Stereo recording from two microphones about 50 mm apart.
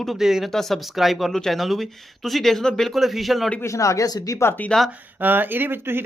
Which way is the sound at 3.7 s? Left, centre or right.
Left.